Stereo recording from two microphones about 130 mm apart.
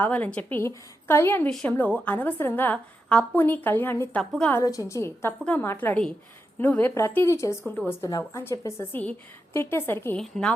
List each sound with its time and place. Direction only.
0.0 s a woman's voice: 10° left (ahead or behind)
4.2 s a woman's voice: 5° left (ahead or behind)
4.5 s a woman's voice: 25° left (ahead or behind)
10.2 s a woman's voice: 5° left (ahead or behind)